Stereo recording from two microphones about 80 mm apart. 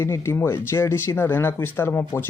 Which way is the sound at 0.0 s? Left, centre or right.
Left.